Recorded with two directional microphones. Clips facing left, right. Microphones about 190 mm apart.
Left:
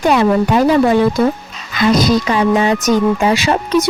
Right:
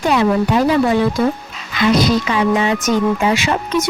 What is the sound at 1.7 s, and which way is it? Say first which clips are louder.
A woman's voice: left 2 dB; 40° left (ahead or behind).